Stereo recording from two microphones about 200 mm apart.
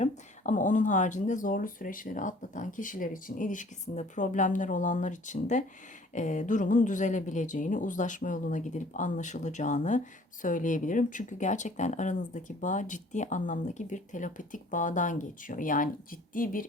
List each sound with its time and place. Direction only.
0.0 s speech: 40° left (ahead or behind)